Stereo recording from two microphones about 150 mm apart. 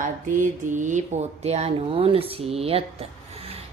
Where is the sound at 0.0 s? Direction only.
60° right (ahead or behind).